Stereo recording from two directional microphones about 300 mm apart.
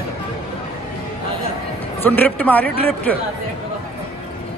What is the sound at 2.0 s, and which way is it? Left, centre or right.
Speech, centre.